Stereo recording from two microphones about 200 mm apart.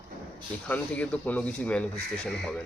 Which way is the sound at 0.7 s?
5° left (ahead or behind).